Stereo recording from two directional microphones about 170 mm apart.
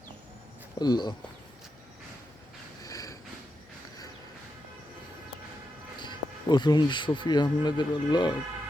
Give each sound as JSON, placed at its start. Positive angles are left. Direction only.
{"t": 0.8, "sound": "speech", "side_deg": 25}
{"t": 2.8, "sound": "a sound", "side_deg": 20}
{"t": 6.0, "sound": "speech", "side_deg": 25}